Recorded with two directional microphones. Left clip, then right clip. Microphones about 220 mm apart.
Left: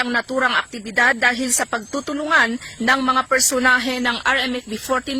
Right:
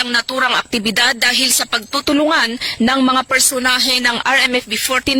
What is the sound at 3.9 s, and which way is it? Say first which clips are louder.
Speech: right 5 dB; 40° right (ahead or behind).